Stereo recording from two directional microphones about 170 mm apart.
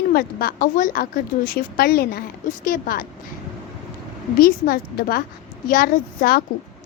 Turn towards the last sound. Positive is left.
turn(degrees=55)  # may be behind; listen again after turning